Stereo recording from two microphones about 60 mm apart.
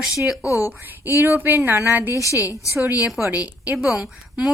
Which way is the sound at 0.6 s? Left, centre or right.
Right.